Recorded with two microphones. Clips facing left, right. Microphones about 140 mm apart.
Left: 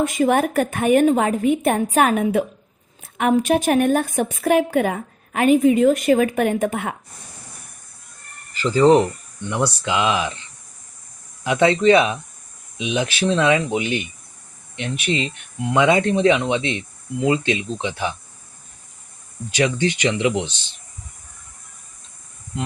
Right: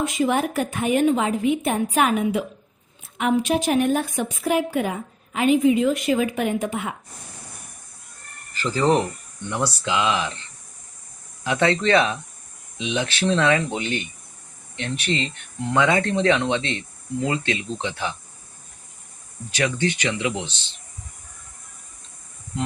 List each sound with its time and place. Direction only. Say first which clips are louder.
0.0 s a woman's voice: left 4 dB; 50° left (ahead or behind)
8.6 s speech: left 6 dB; 15° left (ahead or behind)
11.4 s speech: left 5 dB; 15° left (ahead or behind)
19.5 s speech: left 3 dB; 15° left (ahead or behind)